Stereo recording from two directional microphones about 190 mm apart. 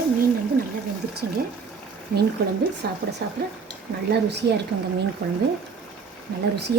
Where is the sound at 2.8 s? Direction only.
55° right (ahead or behind).